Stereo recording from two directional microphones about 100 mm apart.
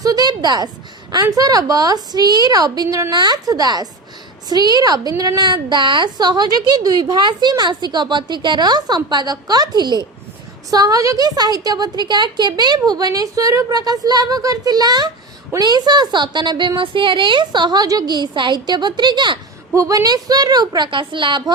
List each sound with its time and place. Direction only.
0.0 s a sound: 40° right (ahead or behind)
1.1 s a woman's voice: 40° right (ahead or behind)
19.7 s a woman's voice: 30° right (ahead or behind); by 21.5 s 55° right (ahead or behind)